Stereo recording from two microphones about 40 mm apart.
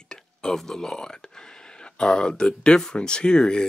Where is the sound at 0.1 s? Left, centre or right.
Centre.